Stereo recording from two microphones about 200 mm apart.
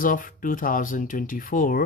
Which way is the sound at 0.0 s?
40° left (ahead or behind).